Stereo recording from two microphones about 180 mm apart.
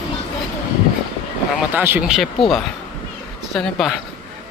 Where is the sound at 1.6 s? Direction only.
10° right (ahead or behind).